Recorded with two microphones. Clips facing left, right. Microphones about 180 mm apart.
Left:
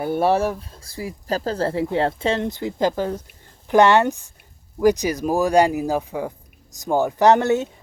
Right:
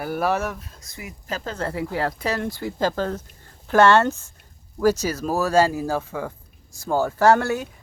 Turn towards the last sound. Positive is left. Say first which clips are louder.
# left 2 dB
turn(degrees=20)  # may be behind; listen again after turning